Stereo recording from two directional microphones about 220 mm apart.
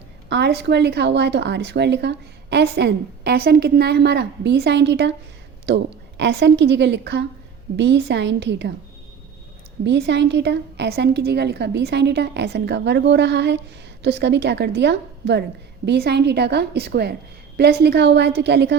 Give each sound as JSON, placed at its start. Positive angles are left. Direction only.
{"t": 0.3, "sound": "a woman's voice", "side_deg": -50}
{"t": 9.8, "sound": "a woman's voice", "side_deg": -50}